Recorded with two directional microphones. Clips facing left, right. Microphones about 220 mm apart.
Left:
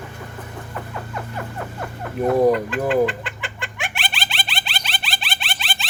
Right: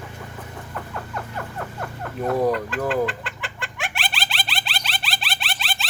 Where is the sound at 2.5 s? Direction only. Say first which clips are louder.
Left 5 dB; centre (ahead or behind).